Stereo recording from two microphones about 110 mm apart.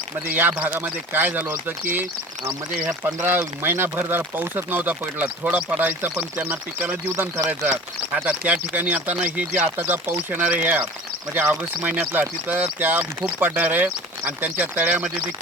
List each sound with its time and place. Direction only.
0.3 s speech: 15° right (ahead or behind)
3.2 s speech: 20° right (ahead or behind)